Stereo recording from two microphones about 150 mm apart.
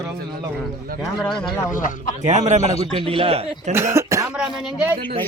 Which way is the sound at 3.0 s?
40° right (ahead or behind).